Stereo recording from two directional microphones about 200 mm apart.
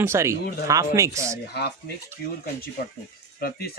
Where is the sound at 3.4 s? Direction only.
45° left (ahead or behind).